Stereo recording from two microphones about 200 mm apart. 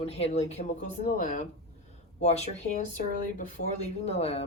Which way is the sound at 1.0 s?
45° left (ahead or behind).